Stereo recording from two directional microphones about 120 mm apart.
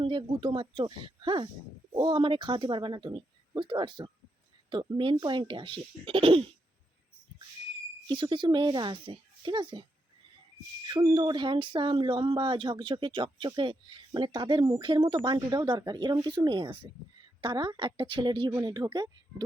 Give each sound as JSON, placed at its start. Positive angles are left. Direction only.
{"t": 0.0, "sound": "speech", "side_deg": -45}
{"t": 8.0, "sound": "speech", "side_deg": -40}
{"t": 10.8, "sound": "speech", "side_deg": -35}